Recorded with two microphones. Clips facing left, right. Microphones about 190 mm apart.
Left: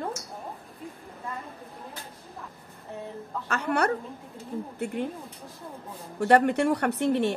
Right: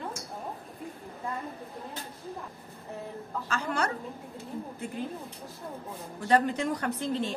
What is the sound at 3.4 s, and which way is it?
Speech, 65° left (ahead or behind).